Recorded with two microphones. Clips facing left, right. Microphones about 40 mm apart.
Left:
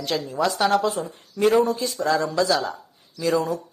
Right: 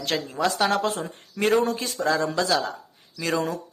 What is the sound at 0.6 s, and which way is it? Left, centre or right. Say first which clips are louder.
Speech: left 3 dB; right.